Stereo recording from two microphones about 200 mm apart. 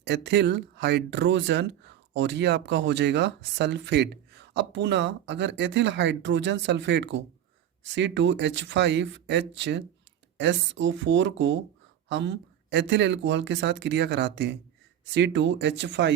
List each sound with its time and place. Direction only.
0.0 s speech: 55° right (ahead or behind)